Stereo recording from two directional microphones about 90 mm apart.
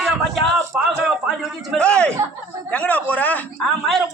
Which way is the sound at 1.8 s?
10° left (ahead or behind).